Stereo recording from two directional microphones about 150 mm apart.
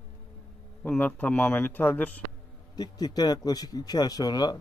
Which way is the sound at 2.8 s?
25° left (ahead or behind).